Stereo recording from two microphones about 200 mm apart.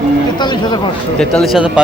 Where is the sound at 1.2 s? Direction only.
5° left (ahead or behind).